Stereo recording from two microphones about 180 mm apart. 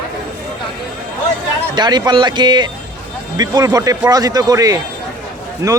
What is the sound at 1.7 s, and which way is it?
Speech, 25° right (ahead or behind).